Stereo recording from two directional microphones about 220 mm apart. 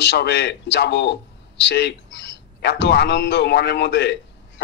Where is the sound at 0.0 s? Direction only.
50° left (ahead or behind).